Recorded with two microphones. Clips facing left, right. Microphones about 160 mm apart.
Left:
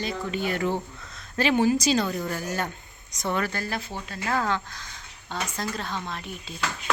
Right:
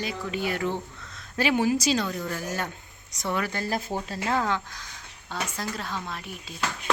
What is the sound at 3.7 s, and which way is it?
Speech, 40° right (ahead or behind).